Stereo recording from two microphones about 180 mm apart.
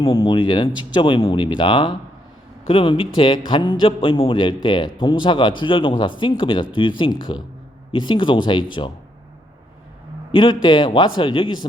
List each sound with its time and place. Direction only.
0.0 s a man's voice: 25° left (ahead or behind)
10.3 s a man's voice: 25° left (ahead or behind)